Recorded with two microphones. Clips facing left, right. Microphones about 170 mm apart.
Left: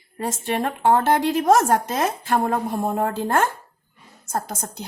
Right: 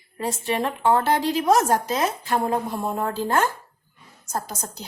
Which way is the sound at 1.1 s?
50° left (ahead or behind).